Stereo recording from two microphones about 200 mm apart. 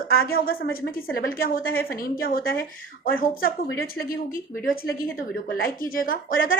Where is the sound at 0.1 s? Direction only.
50° left (ahead or behind).